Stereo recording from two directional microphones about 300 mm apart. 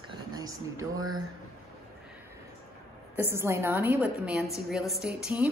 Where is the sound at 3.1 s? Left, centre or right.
Centre.